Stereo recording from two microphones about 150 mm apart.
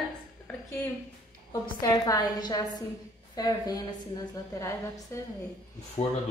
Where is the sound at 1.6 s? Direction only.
25° left (ahead or behind).